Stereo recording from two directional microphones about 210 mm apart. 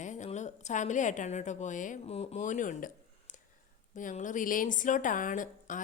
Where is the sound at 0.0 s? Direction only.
35° left (ahead or behind).